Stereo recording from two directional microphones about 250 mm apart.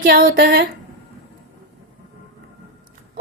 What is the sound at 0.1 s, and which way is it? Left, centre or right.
Speech, right.